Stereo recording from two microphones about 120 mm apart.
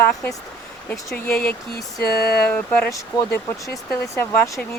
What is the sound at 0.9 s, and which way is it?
Speech, 10° left (ahead or behind).